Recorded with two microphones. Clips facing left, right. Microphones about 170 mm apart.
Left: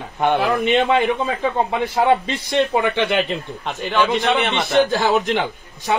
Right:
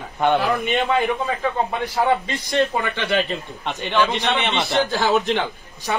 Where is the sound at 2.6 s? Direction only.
20° left (ahead or behind).